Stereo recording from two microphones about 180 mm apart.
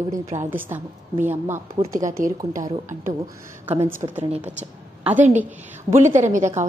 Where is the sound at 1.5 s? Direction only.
45° right (ahead or behind).